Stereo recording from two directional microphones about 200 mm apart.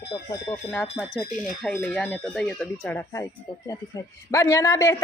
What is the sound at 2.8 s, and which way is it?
Speech, 15° left (ahead or behind).